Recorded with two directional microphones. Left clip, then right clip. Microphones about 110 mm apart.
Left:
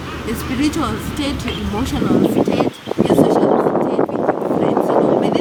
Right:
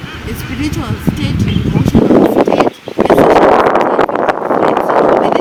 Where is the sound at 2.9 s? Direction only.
85° right.